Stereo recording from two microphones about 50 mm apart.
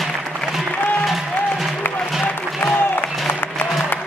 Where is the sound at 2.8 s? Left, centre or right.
Left.